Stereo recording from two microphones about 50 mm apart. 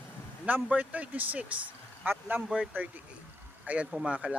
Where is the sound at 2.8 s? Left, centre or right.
Right.